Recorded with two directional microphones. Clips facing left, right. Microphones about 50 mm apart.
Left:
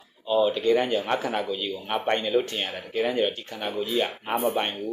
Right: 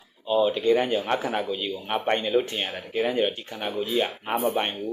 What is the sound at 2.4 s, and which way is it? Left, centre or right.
Speech, centre.